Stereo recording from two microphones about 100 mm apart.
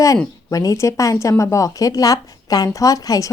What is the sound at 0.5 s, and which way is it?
A woman's voice, 35° left (ahead or behind).